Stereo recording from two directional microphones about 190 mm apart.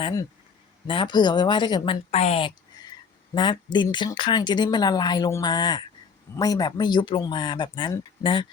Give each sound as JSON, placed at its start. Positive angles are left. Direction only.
{"t": 0.0, "sound": "speech", "side_deg": 20}